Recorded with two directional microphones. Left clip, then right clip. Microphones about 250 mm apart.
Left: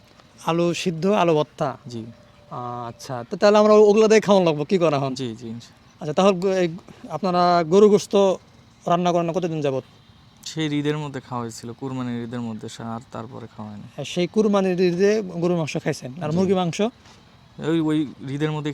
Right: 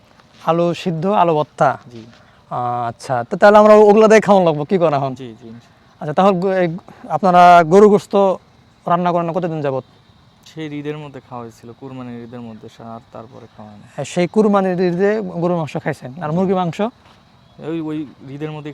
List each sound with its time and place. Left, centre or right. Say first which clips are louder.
0.4 s speech: right 5 dB; centre
1.5 s speech: right 11 dB; right; by 5.1 s centre
5.1 s speech: left 3 dB; left
6.0 s speech: right 5 dB; centre
7.2 s speech: right 11 dB; right; by 9.8 s centre
10.4 s speech: left 2 dB; left
13.9 s speech: right 6 dB; right
17.6 s speech: left 2 dB; left